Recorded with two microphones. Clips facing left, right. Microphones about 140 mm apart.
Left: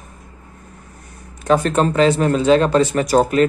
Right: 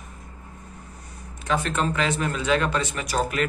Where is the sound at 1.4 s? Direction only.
40° left (ahead or behind).